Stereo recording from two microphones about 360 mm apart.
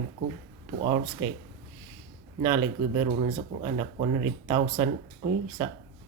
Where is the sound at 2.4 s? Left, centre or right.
Centre.